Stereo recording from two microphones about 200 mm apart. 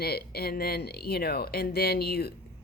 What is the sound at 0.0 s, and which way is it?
Speech, 50° left (ahead or behind).